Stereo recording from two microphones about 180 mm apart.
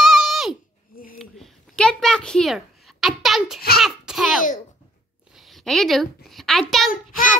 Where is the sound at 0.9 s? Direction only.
50° left (ahead or behind).